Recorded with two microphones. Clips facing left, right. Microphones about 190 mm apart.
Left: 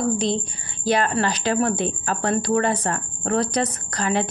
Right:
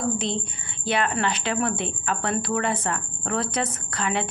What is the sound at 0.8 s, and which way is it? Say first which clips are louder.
A woman's voice: left 4 dB; 40° left (ahead or behind).